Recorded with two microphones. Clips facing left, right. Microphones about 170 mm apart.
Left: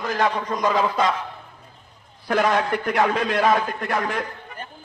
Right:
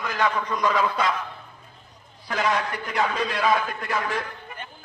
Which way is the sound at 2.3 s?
55° left (ahead or behind).